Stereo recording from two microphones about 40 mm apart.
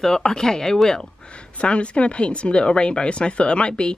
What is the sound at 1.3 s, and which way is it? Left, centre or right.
Speech, left.